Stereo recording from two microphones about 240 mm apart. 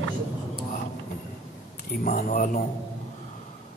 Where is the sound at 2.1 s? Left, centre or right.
Left.